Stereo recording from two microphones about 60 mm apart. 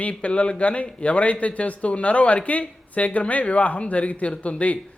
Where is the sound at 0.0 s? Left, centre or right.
Left.